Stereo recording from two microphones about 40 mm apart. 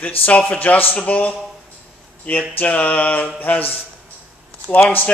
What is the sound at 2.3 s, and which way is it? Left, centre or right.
Speech, left.